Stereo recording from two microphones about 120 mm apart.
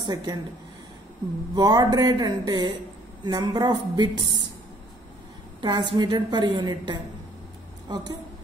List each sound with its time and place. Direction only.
0.0 s a woman's voice: 35° right (ahead or behind)
1.5 s a woman's voice: 35° right (ahead or behind)
5.6 s a woman's voice: 40° right (ahead or behind)